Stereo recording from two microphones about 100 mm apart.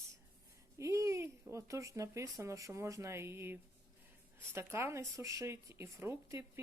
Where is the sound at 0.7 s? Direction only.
30° right (ahead or behind).